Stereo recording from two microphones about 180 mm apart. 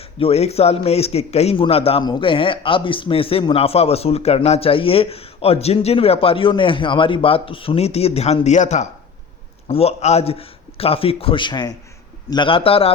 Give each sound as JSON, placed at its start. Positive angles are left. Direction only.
{"t": 0.0, "sound": "a man's voice", "side_deg": 35}